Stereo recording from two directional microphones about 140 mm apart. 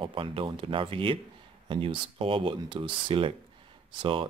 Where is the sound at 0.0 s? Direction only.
40° right (ahead or behind).